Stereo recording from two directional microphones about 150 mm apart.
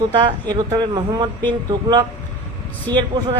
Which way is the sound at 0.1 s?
30° right (ahead or behind).